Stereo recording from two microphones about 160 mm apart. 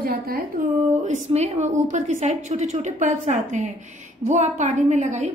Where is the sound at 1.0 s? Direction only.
45° right (ahead or behind).